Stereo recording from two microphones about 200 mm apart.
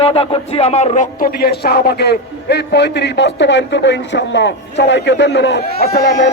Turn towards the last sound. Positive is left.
turn(degrees=50)  # may be behind; listen again after turning